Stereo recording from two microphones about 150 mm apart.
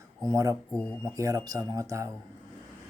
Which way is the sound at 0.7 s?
5° left (ahead or behind).